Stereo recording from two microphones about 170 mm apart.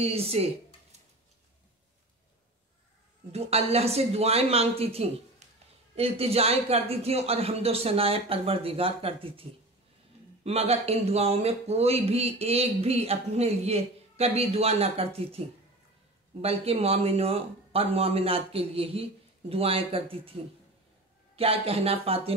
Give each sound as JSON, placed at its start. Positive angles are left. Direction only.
{"t": 0.0, "sound": "speech", "side_deg": -35}
{"t": 3.3, "sound": "speech", "side_deg": -35}
{"t": 21.4, "sound": "speech", "side_deg": -35}